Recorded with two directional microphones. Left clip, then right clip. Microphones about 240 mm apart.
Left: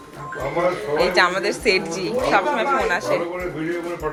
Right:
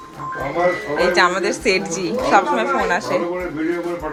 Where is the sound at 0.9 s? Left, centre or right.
Centre.